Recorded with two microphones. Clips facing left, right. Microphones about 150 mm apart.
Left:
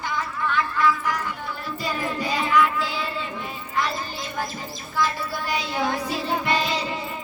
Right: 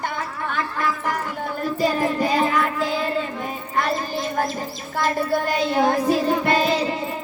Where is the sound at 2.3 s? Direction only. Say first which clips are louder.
Right 1 dB; 50° right (ahead or behind).